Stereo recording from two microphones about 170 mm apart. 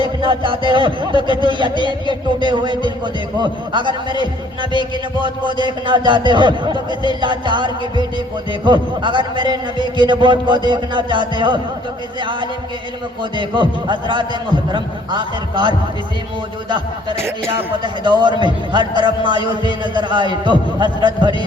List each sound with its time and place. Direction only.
0.0 s a man's voice: 30° right (ahead or behind)
5.5 s a man's voice: 30° right (ahead or behind)